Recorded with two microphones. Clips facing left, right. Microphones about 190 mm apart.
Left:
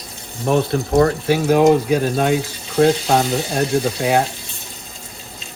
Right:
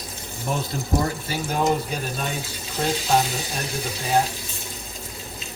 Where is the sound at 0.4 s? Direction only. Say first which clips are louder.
Left 10 dB; 65° left (ahead or behind).